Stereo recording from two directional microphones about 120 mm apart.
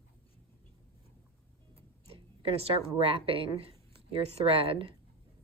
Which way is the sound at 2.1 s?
55° right (ahead or behind).